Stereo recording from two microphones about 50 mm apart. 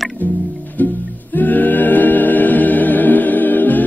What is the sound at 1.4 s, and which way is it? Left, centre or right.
Music, left.